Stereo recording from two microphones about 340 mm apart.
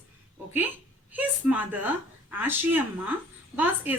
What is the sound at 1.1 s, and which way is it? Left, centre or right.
A woman's voice, centre.